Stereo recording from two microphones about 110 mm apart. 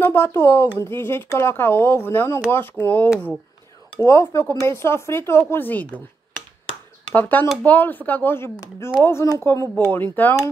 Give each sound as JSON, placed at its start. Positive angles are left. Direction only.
{"t": 0.0, "sound": "speech", "side_deg": 15}
{"t": 4.0, "sound": "speech", "side_deg": 25}
{"t": 7.2, "sound": "speech", "side_deg": 15}